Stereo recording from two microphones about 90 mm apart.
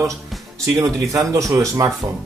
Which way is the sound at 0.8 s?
35° right (ahead or behind).